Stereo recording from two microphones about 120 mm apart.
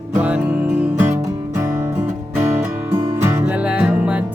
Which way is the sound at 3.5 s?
10° right (ahead or behind).